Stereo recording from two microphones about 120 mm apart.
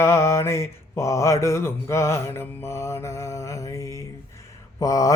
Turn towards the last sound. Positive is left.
turn(degrees=30)  # may be behind; listen again after turning